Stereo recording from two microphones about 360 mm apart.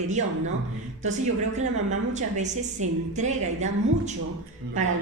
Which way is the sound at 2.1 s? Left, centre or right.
Centre.